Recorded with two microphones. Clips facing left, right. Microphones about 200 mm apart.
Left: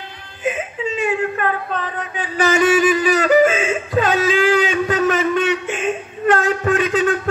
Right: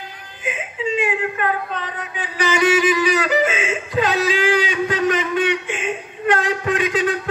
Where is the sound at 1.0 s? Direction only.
45° left (ahead or behind).